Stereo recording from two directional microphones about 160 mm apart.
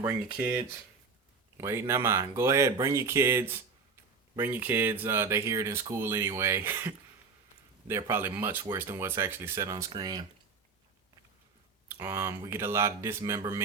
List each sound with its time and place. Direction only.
0.0 s speech: 10° right (ahead or behind)
1.5 s speech: 15° right (ahead or behind)
11.9 s speech: 15° right (ahead or behind)